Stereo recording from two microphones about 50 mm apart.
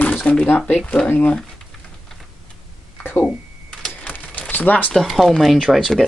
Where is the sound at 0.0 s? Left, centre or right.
Left.